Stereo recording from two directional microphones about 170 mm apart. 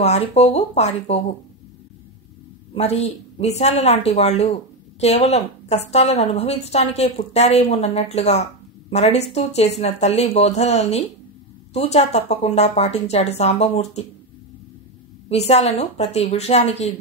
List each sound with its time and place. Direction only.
0.0 s a woman's voice: 40° left (ahead or behind)
2.7 s a woman's voice: 35° left (ahead or behind)
15.2 s a woman's voice: 40° left (ahead or behind)